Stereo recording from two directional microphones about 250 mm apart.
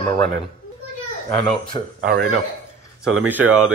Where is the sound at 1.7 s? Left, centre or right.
Right.